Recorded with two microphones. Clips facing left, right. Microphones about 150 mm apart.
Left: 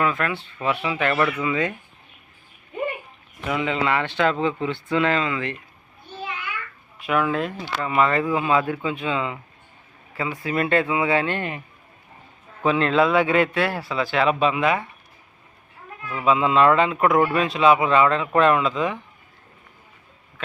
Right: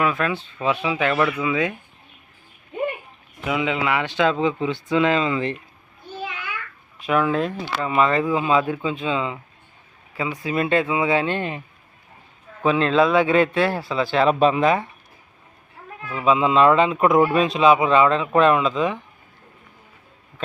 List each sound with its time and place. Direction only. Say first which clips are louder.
0.0 s speech: right 1 dB; 15° right (ahead or behind)
3.4 s speech: right 1 dB; 5° right (ahead or behind); by 5.5 s 25° right (ahead or behind)
7.0 s speech: right 2 dB; 20° right (ahead or behind)
12.6 s speech: right 1 dB; 20° right (ahead or behind); by 14.8 s 35° right (ahead or behind)
16.0 s speech: right 1 dB; 20° right (ahead or behind)